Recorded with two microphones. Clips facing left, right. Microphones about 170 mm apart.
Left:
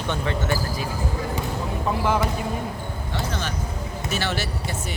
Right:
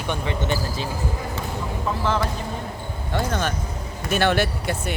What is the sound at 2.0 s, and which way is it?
Speech, 15° left (ahead or behind).